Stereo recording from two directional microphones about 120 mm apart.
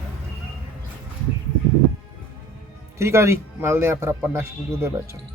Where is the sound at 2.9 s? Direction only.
25° right (ahead or behind).